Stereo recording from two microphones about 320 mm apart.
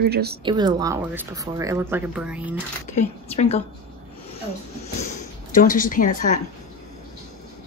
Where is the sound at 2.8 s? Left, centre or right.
Left.